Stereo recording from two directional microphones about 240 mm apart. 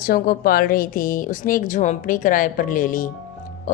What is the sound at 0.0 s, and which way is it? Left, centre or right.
A woman's voice, left.